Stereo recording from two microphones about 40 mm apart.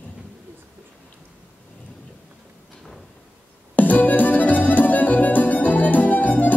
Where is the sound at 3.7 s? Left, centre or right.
Left.